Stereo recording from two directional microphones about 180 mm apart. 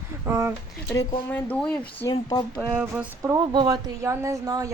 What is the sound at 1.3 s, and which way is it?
Speech, 10° left (ahead or behind).